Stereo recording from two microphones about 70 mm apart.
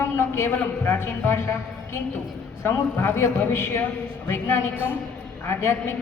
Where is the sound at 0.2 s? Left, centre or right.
Left.